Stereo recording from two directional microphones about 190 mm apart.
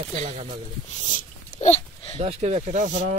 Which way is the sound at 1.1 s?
35° left (ahead or behind).